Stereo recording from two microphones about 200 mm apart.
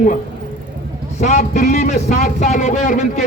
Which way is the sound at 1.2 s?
35° left (ahead or behind).